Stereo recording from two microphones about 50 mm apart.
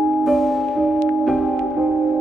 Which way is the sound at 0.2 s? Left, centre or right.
Centre.